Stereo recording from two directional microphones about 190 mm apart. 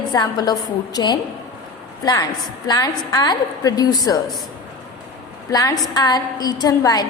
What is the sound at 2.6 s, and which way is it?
A woman's voice, 20° left (ahead or behind).